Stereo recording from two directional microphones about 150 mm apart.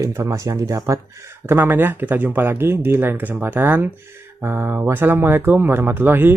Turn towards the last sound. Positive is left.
turn(degrees=-15)  # may be behind; listen again after turning